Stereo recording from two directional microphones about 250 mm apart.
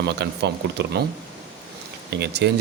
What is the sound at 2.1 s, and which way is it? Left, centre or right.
Speech, right.